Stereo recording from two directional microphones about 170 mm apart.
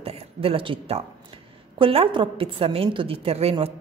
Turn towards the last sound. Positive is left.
turn(degrees=-35)  # may be behind; listen again after turning